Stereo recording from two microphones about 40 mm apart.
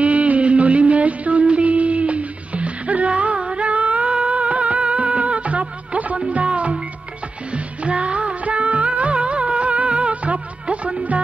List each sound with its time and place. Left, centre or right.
0.0 s music: right
3.3 s a sound: right
3.6 s music: right